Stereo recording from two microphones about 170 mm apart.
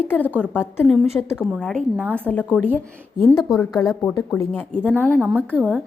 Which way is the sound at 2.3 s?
10° left (ahead or behind).